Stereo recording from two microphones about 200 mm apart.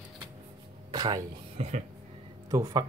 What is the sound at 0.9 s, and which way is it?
Music, 20° right (ahead or behind).